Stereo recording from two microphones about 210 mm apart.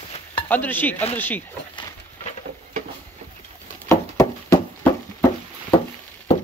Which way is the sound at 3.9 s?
10° left (ahead or behind).